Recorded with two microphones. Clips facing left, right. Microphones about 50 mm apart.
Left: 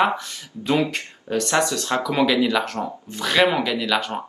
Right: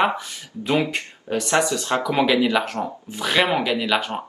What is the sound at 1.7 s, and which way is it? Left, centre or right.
Speech, centre.